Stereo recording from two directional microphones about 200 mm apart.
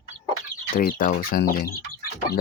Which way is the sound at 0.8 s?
45° left (ahead or behind).